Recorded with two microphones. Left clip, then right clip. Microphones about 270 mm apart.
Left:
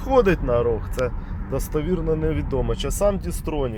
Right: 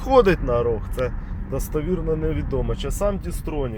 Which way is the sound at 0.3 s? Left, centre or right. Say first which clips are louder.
Even; centre.